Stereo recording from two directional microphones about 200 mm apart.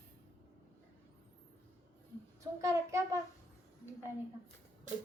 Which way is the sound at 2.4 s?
15° right (ahead or behind).